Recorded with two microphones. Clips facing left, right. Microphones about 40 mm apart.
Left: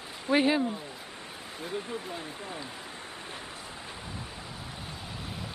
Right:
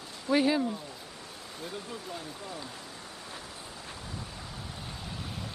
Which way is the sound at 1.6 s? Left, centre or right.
Left.